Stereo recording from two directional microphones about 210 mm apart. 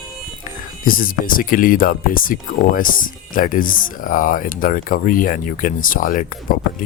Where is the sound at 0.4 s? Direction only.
40° left (ahead or behind).